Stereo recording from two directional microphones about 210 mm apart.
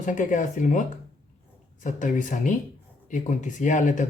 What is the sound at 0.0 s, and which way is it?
Speech, 40° left (ahead or behind).